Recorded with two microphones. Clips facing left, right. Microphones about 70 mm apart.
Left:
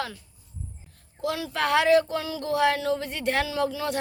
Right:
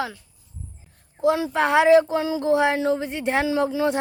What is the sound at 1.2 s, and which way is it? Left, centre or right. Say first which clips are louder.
Speech: right 7 dB; right.